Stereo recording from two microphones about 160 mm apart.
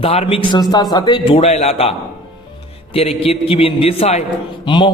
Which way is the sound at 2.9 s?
40° left (ahead or behind).